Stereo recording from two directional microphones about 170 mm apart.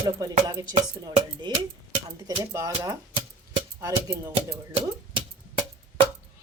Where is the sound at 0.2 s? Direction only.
20° right (ahead or behind).